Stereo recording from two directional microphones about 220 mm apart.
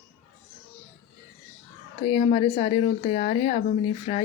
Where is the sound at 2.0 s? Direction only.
30° left (ahead or behind).